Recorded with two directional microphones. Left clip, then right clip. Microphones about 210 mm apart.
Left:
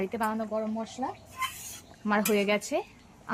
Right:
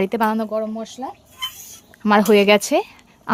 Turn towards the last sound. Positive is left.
turn(degrees=-60)  # may be behind; listen again after turning